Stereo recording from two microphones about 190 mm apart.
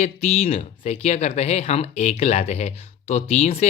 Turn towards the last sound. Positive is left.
turn(degrees=35)  # may be behind; listen again after turning